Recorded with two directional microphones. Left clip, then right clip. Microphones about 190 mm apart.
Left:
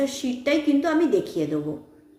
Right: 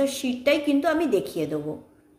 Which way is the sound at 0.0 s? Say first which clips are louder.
Right 2 dB; 30° right (ahead or behind).